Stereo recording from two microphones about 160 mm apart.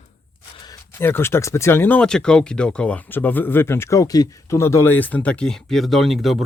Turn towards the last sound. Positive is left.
turn(degrees=0)  # may be behind; listen again after turning